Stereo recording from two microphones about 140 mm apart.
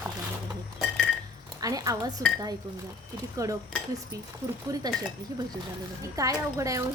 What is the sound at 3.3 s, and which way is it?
A woman's voice, 25° right (ahead or behind).